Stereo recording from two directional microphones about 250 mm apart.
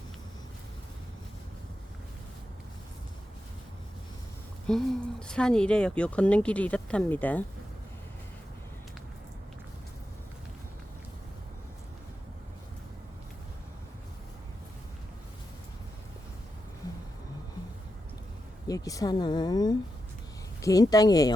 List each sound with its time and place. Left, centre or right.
4.7 s speech: centre
18.7 s a woman's voice: centre